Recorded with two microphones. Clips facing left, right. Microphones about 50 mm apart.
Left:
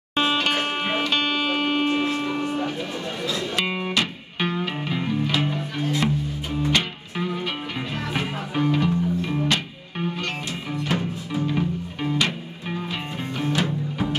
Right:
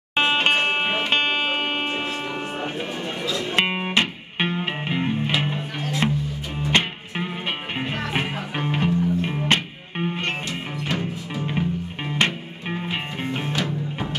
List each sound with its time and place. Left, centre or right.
0.1 s music: right
11.4 s music: right